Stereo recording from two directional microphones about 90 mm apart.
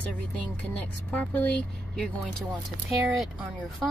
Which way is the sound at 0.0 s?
15° left (ahead or behind).